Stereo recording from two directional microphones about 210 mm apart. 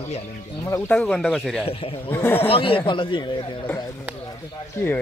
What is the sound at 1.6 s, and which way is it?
Speech, 25° left (ahead or behind).